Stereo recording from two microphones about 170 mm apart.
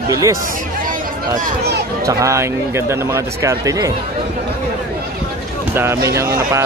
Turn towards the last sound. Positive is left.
turn(degrees=-15)  # may be behind; listen again after turning